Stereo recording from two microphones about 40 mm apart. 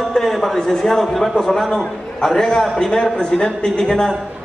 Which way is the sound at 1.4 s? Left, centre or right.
Centre.